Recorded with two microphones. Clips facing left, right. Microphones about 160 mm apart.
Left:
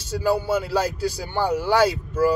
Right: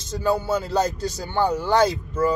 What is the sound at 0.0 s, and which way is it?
Speech, 10° left (ahead or behind).